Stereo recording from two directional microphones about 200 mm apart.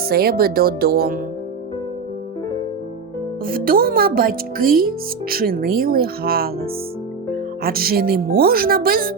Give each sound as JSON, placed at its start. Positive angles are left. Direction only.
{"t": 0.0, "sound": "speech", "side_deg": -50}
{"t": 3.4, "sound": "speech", "side_deg": -45}
{"t": 7.6, "sound": "speech", "side_deg": -50}